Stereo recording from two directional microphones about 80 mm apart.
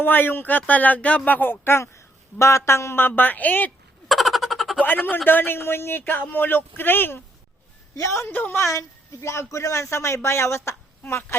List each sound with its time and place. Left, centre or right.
0.0 s speech: left
4.1 s a sound: centre
4.8 s speech: left
7.9 s speech: left
8.3 s speech: left
9.2 s speech: left